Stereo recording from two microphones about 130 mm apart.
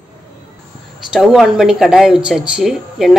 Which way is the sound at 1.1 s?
5° right (ahead or behind).